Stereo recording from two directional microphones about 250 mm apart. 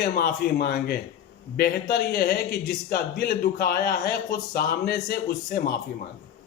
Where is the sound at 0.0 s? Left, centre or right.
Left.